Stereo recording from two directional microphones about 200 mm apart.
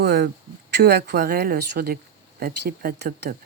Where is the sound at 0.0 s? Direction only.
55° right (ahead or behind).